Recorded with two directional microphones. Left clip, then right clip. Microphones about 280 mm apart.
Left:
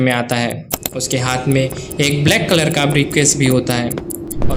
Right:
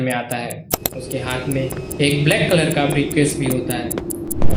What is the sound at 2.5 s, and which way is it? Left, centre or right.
Speech, left.